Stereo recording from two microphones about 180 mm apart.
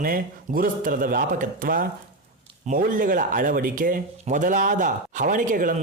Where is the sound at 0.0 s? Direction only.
50° right (ahead or behind).